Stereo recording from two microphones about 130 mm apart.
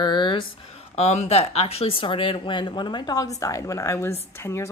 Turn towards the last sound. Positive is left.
turn(degrees=20)  # may be behind; listen again after turning